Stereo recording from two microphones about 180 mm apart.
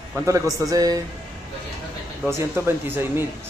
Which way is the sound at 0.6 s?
20° right (ahead or behind).